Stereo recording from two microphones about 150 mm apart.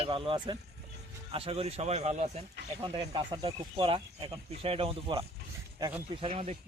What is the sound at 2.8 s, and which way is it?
A man's voice, 30° right (ahead or behind).